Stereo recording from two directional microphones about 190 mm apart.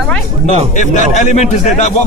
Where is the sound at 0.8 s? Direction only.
40° left (ahead or behind).